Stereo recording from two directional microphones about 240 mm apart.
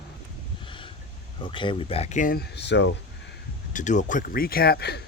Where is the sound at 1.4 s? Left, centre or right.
Centre; by 2.9 s left.